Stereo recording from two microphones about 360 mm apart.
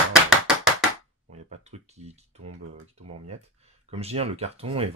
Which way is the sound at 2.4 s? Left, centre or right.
Right.